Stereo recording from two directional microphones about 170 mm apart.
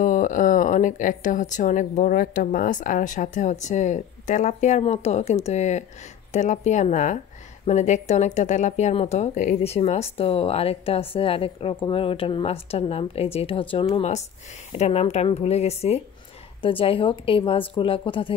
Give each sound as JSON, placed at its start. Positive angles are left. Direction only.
{"t": 0.0, "sound": "speech", "side_deg": 50}